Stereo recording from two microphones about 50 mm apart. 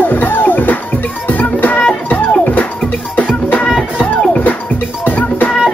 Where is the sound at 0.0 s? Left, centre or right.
Left.